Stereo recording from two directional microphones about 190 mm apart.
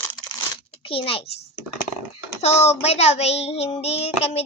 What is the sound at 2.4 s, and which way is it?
Child singing, 35° left (ahead or behind).